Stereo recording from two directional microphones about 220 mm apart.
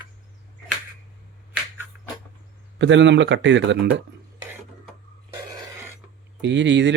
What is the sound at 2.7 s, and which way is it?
Speech, 55° right (ahead or behind).